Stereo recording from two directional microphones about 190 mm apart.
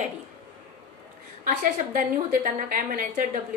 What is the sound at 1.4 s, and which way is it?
Speech, 45° right (ahead or behind).